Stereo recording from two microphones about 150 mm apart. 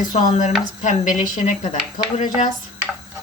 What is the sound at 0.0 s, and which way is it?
Speech, 60° left (ahead or behind).